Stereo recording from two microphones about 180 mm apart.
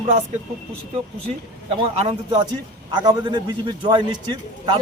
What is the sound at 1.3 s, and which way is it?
A man's voice, 35° right (ahead or behind).